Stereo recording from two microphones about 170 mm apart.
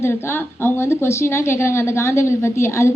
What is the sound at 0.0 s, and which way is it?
A woman's voice, 15° left (ahead or behind).